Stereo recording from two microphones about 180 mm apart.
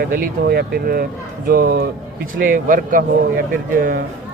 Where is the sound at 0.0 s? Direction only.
60° right (ahead or behind).